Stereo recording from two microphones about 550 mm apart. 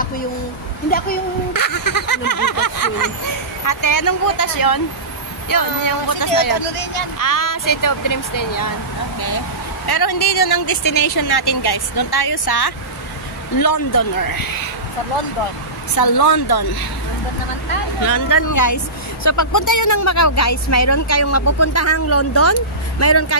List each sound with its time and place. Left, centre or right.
0.8 s speech: centre
1.5 s speech: left
5.9 s speech: left
6.6 s speech: left
7.2 s speech: left
9.8 s speech: left
15.9 s speech: left
18.0 s speech: left